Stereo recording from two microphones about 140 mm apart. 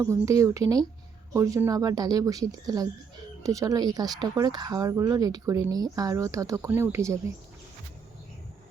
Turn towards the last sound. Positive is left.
turn(degrees=-20)  # may be behind; listen again after turning